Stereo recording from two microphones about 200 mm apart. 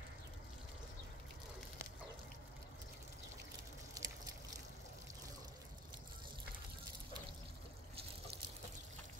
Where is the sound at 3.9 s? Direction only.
20° right (ahead or behind).